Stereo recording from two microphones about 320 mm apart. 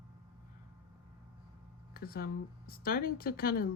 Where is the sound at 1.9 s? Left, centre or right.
Left.